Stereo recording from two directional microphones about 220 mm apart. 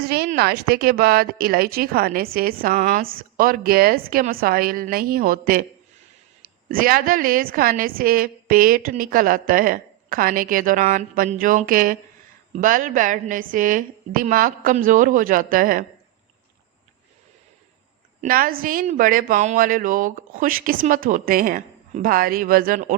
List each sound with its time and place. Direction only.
0.0 s a sound: 45° right (ahead or behind)
0.3 s speech: 45° right (ahead or behind)
6.7 s speech: 40° right (ahead or behind)
18.2 s speech: 40° right (ahead or behind)